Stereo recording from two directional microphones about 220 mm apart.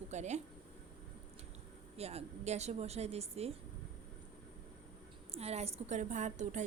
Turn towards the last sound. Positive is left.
turn(degrees=-35)  # may be behind; listen again after turning